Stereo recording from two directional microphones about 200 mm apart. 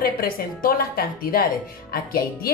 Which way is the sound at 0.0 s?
45° left (ahead or behind).